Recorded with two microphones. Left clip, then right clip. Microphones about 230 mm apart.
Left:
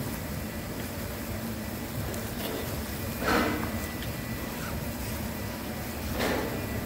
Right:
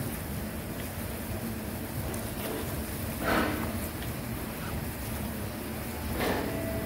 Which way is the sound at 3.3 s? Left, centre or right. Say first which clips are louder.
Left 2 dB; left.